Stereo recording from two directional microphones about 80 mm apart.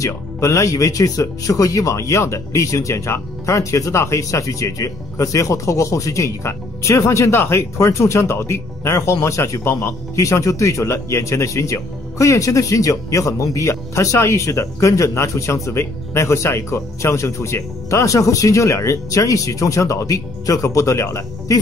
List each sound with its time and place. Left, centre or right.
0.0 s speech: left